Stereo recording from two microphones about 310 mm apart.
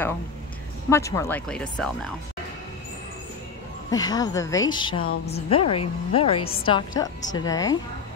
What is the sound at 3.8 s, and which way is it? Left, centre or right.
Speech, centre.